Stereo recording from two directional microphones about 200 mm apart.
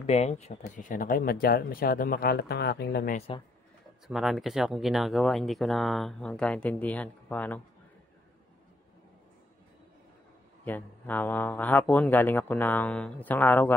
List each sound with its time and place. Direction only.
0.0 s speech: 35° left (ahead or behind); by 3.2 s 50° left (ahead or behind)
3.2 s speech: 25° left (ahead or behind)
4.1 s speech: centre (ahead or behind)
10.6 s speech: 10° left (ahead or behind)